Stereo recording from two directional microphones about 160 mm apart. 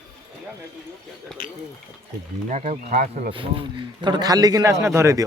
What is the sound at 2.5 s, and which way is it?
Speech, 45° right (ahead or behind).